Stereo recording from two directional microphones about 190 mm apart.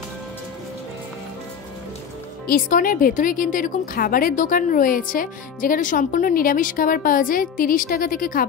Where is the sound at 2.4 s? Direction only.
50° left (ahead or behind).